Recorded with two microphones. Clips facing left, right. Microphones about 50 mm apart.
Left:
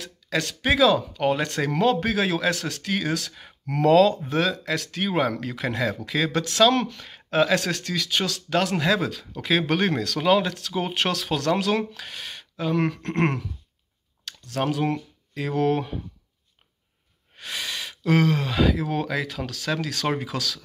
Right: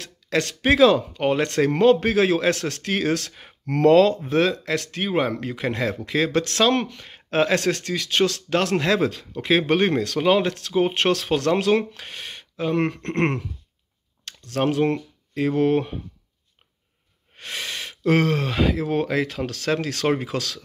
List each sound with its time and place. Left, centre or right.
0.0 s a sound: right
0.7 s speech: right
4.2 s speech: right
7.2 s speech: right
9.4 s speech: right
14.7 s speech: right
17.4 s speech: right